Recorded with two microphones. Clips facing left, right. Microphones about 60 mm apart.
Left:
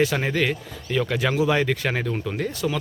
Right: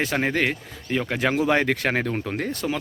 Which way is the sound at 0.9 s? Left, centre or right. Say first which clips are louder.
Even; right.